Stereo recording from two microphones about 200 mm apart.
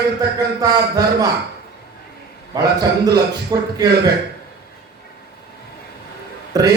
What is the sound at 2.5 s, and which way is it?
Speech, 20° right (ahead or behind).